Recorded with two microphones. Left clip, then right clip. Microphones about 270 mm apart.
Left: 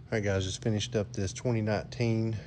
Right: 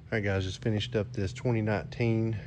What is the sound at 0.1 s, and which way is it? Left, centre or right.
Speech, centre.